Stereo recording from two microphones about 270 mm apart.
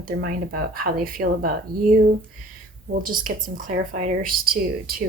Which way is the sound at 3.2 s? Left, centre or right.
Right.